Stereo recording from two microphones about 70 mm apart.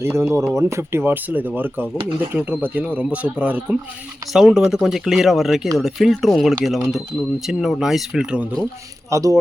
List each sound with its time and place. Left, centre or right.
0.0 s a man's voice: right; by 3.8 s centre
4.3 s speech: centre
9.0 s speech: right